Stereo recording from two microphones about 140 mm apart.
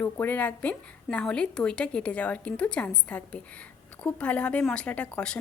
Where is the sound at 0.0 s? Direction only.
10° left (ahead or behind).